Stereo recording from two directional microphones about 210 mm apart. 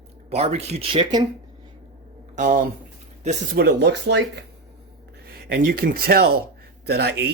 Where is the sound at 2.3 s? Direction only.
40° right (ahead or behind); by 4.2 s 55° right (ahead or behind).